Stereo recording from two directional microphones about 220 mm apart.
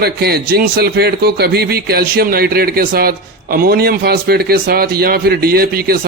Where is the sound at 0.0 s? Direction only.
45° right (ahead or behind).